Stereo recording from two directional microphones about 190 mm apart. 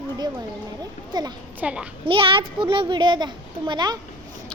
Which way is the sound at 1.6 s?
5° right (ahead or behind).